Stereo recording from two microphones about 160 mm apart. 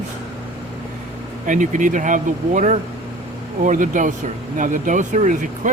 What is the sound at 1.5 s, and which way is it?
Speech, 55° right (ahead or behind).